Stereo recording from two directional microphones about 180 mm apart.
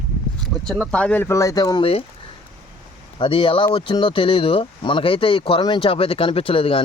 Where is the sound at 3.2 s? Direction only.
30° left (ahead or behind).